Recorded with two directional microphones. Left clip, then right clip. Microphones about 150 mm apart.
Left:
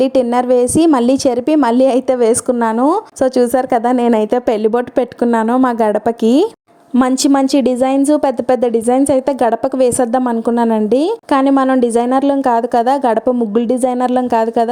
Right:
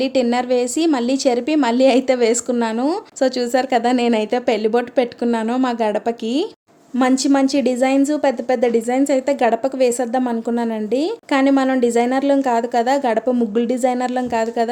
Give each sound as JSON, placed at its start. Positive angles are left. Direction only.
{"t": 0.0, "sound": "a woman's voice", "side_deg": 45}